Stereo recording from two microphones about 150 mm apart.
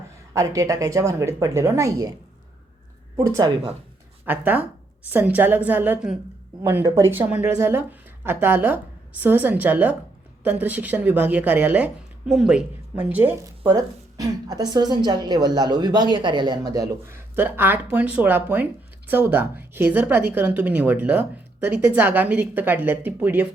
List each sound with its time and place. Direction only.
0.3 s speech: 20° right (ahead or behind)
3.2 s a woman's voice: 20° right (ahead or behind)
13.7 s a woman's voice: 25° right (ahead or behind)